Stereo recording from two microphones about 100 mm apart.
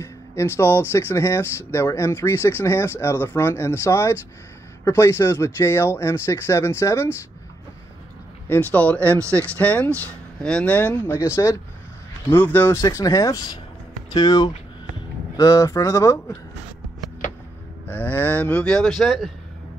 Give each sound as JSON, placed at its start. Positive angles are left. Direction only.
{"t": 0.0, "sound": "speech", "side_deg": 25}
{"t": 8.5, "sound": "speech", "side_deg": 15}
{"t": 11.1, "sound": "speech", "side_deg": 30}
{"t": 12.8, "sound": "speech", "side_deg": 35}
{"t": 17.8, "sound": "speech", "side_deg": 15}